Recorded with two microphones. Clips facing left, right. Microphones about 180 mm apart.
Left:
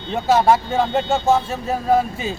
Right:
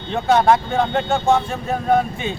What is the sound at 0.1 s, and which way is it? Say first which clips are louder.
Speech: even; 5° left (ahead or behind).